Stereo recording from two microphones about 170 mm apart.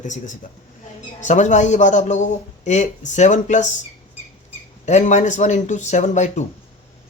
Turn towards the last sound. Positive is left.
turn(degrees=45)  # may be behind; listen again after turning